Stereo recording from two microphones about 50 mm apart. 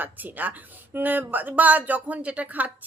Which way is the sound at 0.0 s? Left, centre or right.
Right.